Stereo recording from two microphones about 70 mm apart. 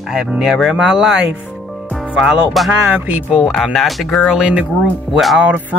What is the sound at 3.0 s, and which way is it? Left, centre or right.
Speech, right.